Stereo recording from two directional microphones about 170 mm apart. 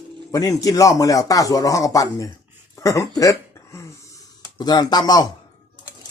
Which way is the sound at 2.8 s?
20° left (ahead or behind).